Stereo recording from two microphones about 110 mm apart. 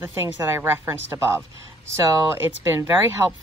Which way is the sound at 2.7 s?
20° right (ahead or behind).